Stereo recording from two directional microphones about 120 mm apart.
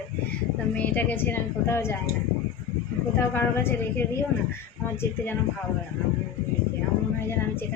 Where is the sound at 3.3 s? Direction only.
20° left (ahead or behind).